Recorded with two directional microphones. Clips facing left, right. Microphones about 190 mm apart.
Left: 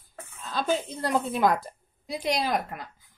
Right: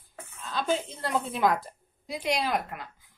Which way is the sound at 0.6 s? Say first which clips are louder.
Left 2 dB; 40° left (ahead or behind).